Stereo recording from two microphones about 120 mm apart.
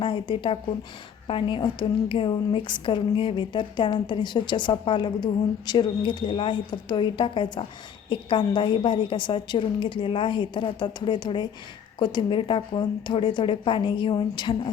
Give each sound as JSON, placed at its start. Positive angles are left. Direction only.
{"t": 0.0, "sound": "a woman's voice", "side_deg": 45}